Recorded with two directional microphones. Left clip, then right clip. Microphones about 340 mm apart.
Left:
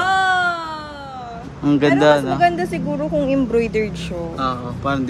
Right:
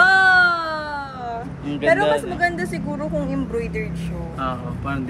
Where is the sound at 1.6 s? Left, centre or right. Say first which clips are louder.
Left 4 dB; left.